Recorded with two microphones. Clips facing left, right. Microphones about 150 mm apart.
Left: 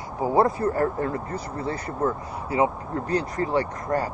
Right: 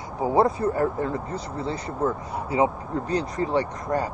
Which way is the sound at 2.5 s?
20° right (ahead or behind).